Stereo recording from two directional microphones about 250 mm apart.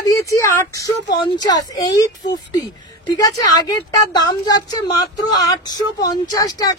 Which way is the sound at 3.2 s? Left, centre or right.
Centre.